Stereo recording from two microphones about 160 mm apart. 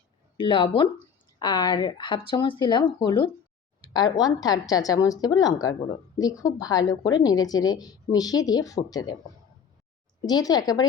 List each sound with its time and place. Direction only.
0.3 s speech: 30° left (ahead or behind)
10.2 s speech: 25° left (ahead or behind)